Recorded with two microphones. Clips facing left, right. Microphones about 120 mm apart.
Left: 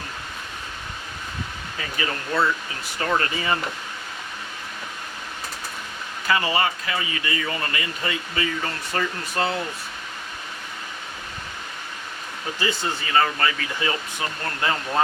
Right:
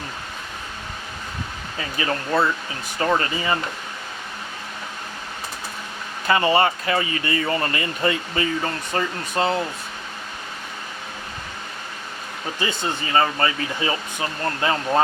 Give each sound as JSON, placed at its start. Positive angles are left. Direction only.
{"t": 3.1, "sound": "speech", "side_deg": -20}
{"t": 6.2, "sound": "speech", "side_deg": -30}
{"t": 12.5, "sound": "speech", "side_deg": -25}